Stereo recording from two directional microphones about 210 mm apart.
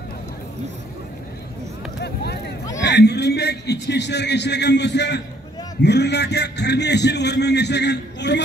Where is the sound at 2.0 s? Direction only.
50° left (ahead or behind).